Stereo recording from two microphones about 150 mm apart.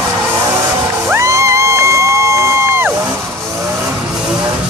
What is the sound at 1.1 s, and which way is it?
Music, 20° right (ahead or behind).